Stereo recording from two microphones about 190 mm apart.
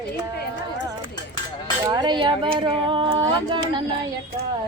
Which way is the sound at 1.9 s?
20° right (ahead or behind).